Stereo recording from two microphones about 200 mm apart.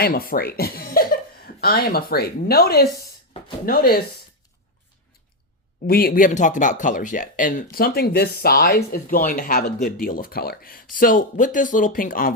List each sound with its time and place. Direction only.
0.0 s speech: 50° left (ahead or behind)
5.9 s speech: 50° left (ahead or behind)